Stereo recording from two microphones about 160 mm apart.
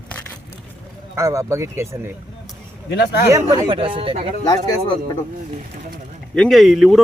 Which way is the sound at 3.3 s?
20° right (ahead or behind).